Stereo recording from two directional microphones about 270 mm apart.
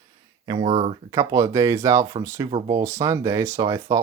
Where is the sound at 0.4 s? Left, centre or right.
Centre.